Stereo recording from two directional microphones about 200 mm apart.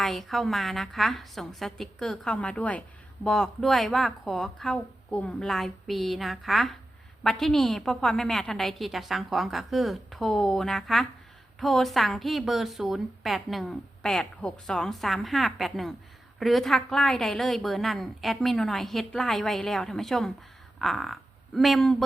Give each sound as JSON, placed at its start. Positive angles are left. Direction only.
{"t": 0.0, "sound": "a woman's voice", "side_deg": 0}